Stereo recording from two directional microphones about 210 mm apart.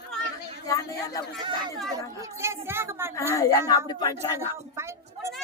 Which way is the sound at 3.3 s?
15° left (ahead or behind).